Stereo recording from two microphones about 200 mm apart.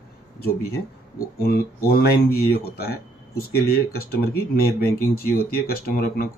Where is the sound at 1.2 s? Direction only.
50° left (ahead or behind).